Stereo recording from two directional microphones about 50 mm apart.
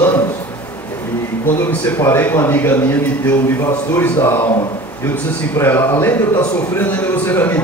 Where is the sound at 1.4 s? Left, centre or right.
Left.